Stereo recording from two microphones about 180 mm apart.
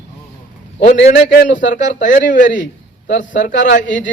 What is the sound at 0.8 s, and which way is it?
A man's voice, 50° left (ahead or behind).